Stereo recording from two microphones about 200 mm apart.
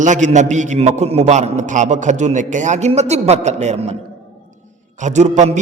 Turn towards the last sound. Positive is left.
turn(degrees=-35)  # may be behind; listen again after turning